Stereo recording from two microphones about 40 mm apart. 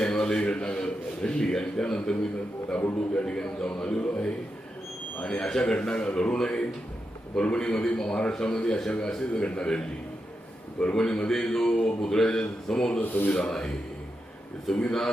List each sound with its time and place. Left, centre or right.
0.0 s a sound: centre
0.4 s a man's voice: left
3.2 s a man's voice: centre
3.8 s a man's voice: left
10.9 s a man's voice: centre
13.0 s speech: left
13.3 s a man's voice: centre